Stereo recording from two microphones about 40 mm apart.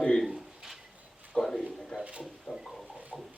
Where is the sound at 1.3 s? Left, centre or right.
Centre.